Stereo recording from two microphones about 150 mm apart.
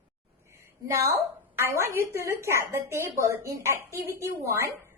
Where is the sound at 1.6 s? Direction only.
20° right (ahead or behind).